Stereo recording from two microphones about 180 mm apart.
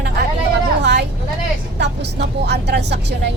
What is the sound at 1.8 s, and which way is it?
Speech, 70° right (ahead or behind).